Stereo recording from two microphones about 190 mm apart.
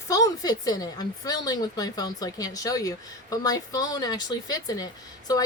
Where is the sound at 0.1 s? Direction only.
20° left (ahead or behind).